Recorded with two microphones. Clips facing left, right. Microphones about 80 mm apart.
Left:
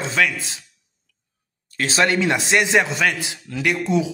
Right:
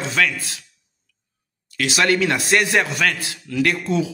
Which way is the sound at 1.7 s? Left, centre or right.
Left.